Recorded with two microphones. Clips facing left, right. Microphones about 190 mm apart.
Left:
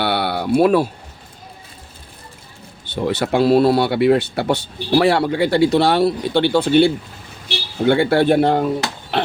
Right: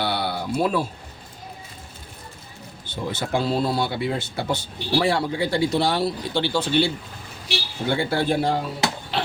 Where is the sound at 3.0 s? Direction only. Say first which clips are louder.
Left 9 dB; 70° left (ahead or behind).